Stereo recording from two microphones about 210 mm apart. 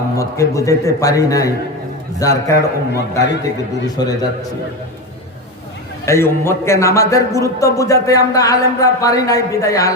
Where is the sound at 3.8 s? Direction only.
20° left (ahead or behind).